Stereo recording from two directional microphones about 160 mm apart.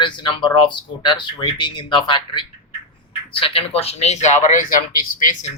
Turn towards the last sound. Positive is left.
turn(degrees=55)  # may be behind; listen again after turning